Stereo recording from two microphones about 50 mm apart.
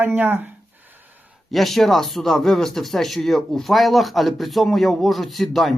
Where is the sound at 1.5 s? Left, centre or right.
Centre.